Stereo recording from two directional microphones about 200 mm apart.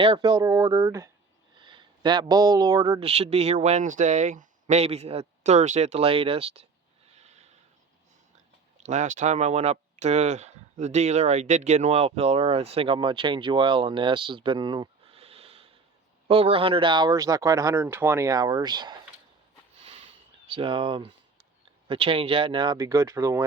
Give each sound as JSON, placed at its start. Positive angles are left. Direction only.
{"t": 0.0, "sound": "speech", "side_deg": -20}
{"t": 8.8, "sound": "speech", "side_deg": -35}
{"t": 20.5, "sound": "speech", "side_deg": -25}